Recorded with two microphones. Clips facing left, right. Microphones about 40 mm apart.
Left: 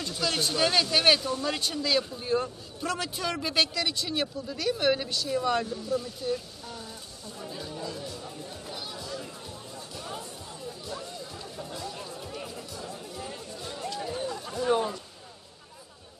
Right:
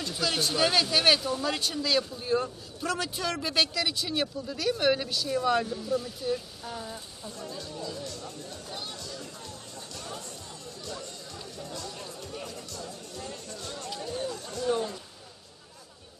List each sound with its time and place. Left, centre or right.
0.0 s speech: centre
7.3 s chatter: centre
8.9 s music: centre
9.9 s chatter: centre
11.5 s music: centre
13.9 s a sound: centre